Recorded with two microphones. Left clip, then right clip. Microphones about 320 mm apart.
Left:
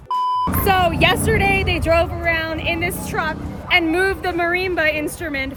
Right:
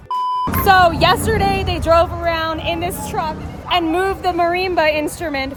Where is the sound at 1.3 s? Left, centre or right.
Right.